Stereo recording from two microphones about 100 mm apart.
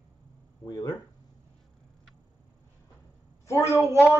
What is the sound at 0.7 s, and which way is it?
Speech, 40° left (ahead or behind).